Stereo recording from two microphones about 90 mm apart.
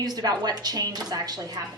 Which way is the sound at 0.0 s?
45° right (ahead or behind).